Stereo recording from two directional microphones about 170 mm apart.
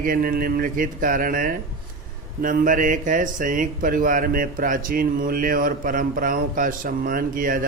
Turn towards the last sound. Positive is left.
turn(degrees=-55)  # may be behind; listen again after turning